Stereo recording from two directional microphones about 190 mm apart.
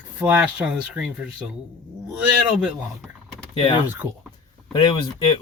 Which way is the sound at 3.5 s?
25° left (ahead or behind).